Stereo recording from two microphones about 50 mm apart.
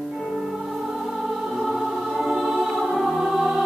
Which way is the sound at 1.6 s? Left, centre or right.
Centre.